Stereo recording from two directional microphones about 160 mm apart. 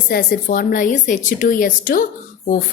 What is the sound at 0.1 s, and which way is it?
Speech, 60° left (ahead or behind).